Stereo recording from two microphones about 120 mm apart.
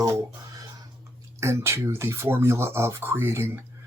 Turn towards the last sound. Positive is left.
turn(degrees=-20)  # may be behind; listen again after turning